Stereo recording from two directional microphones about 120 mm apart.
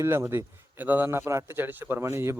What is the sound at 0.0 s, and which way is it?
Speech, 20° right (ahead or behind).